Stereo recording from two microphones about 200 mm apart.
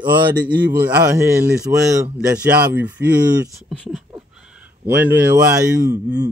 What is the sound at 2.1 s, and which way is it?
A man's voice, 5° right (ahead or behind).